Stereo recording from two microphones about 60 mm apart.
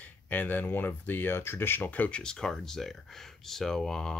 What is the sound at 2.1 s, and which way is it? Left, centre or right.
Speech, centre.